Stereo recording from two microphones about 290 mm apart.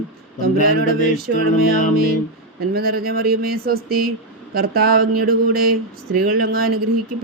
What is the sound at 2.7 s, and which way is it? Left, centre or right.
Speech, right.